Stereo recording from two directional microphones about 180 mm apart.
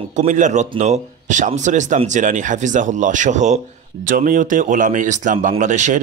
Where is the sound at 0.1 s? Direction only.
40° right (ahead or behind).